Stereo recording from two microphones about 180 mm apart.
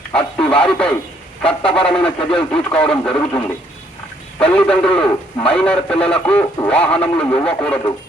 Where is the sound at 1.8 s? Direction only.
5° left (ahead or behind).